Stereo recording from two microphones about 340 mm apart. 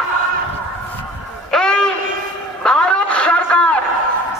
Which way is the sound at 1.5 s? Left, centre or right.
Centre.